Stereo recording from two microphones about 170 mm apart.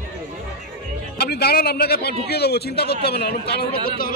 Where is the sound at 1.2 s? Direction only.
70° left (ahead or behind).